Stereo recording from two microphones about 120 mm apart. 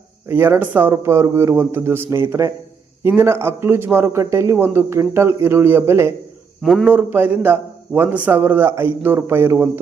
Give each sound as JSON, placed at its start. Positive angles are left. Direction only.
{"t": 0.3, "sound": "a man's voice", "side_deg": -20}
{"t": 6.6, "sound": "a man's voice", "side_deg": 0}
{"t": 6.8, "sound": "a man's voice", "side_deg": -15}